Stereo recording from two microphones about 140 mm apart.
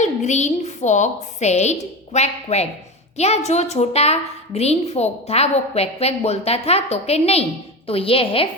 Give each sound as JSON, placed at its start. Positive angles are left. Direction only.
{"t": 0.0, "sound": "a woman's voice", "side_deg": 55}